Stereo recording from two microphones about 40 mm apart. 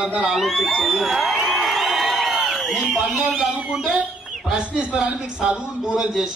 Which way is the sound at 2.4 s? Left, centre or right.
Centre.